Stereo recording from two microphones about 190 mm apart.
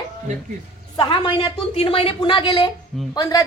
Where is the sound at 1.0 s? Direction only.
25° left (ahead or behind).